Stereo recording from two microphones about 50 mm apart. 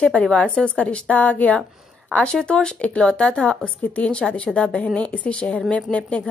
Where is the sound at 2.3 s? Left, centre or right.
Centre.